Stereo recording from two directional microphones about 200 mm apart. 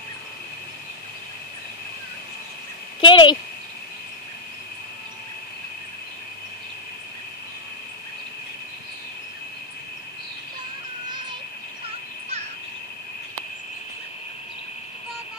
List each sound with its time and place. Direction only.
3.0 s speech: 25° left (ahead or behind)